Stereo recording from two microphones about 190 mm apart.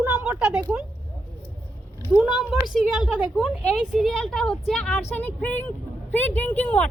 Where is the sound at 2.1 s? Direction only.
5° right (ahead or behind).